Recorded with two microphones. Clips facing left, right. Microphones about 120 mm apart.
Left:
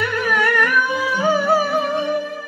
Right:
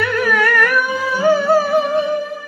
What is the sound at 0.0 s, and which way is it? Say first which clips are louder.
Music: right 3 dB; 20° left (ahead or behind).